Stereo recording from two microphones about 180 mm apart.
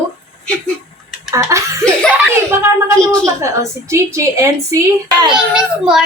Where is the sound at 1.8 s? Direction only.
5° left (ahead or behind).